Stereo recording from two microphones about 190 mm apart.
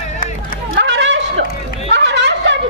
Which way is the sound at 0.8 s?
75° right (ahead or behind).